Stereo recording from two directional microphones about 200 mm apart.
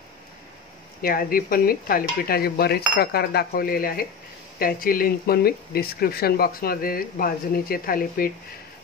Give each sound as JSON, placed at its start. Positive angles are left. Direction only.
{"t": 1.0, "sound": "speech", "side_deg": 45}